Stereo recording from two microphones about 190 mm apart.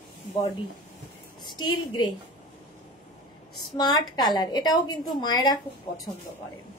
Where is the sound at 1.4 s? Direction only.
20° left (ahead or behind).